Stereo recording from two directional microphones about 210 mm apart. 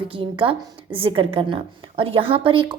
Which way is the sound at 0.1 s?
25° right (ahead or behind).